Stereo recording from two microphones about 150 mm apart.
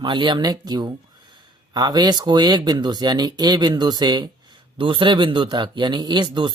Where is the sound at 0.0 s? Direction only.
30° right (ahead or behind).